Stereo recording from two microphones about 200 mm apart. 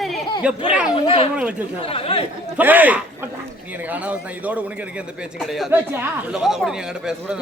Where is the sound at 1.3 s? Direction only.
5° right (ahead or behind).